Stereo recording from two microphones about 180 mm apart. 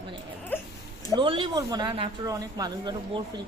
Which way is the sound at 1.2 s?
25° right (ahead or behind).